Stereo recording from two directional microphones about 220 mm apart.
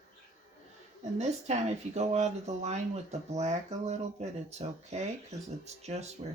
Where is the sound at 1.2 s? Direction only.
30° right (ahead or behind).